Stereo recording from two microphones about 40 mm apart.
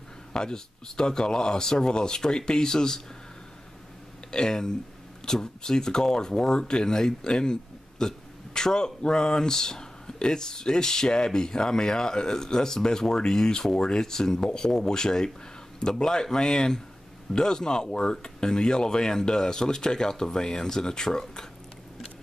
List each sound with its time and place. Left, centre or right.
0.3 s speech: centre
4.3 s speech: centre